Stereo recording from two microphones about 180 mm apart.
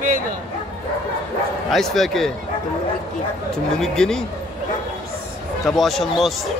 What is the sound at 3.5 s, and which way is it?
Speech, 5° left (ahead or behind).